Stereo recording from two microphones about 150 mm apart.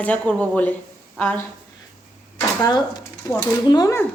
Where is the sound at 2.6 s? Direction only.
25° left (ahead or behind).